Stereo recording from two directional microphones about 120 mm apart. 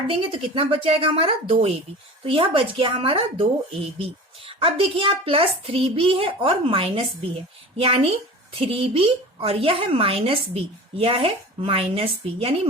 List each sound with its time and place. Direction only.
0.1 s a woman's voice: 50° right (ahead or behind)
8.5 s a woman's voice: 50° right (ahead or behind)